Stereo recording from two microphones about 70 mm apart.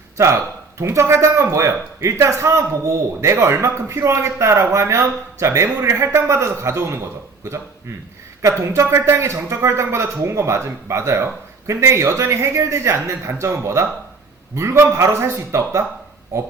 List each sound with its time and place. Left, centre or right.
0.8 s speech: right